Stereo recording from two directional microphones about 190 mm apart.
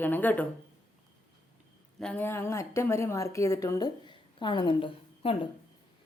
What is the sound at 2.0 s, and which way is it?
A woman's voice, 5° left (ahead or behind).